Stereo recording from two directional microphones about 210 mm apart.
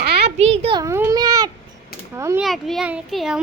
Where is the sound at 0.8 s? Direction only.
10° right (ahead or behind).